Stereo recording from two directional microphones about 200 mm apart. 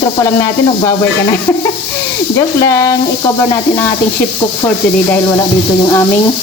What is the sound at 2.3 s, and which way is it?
Music, 15° left (ahead or behind).